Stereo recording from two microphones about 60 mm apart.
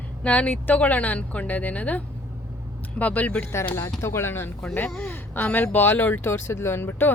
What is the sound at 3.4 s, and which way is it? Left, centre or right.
Speech, left.